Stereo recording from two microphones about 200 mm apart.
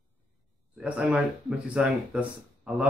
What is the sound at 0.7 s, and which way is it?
A man's voice, 5° right (ahead or behind).